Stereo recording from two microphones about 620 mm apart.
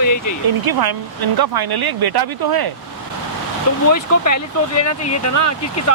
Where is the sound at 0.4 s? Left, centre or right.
Right.